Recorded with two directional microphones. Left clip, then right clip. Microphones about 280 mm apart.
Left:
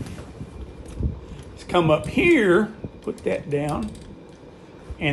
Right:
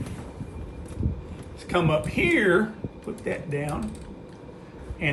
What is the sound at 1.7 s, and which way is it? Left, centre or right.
Speech, left.